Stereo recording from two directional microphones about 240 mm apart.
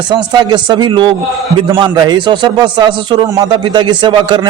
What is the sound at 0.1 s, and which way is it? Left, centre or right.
A man's voice, centre.